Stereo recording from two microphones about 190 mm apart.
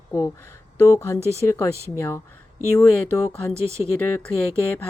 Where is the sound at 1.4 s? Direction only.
15° left (ahead or behind).